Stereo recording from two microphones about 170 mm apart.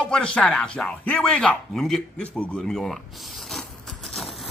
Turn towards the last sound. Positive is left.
turn(degrees=0)  # may be behind; listen again after turning